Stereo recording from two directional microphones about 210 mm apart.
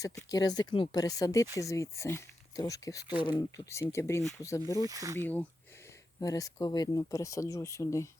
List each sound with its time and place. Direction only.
0.0 s speech: 15° left (ahead or behind)
4.8 s speech: 15° right (ahead or behind)
5.2 s speech: 10° left (ahead or behind)